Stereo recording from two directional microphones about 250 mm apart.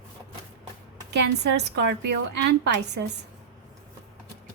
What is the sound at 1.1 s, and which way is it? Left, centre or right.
A woman's voice, right.